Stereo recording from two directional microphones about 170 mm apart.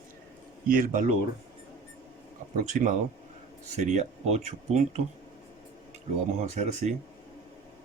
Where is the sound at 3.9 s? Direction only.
40° right (ahead or behind).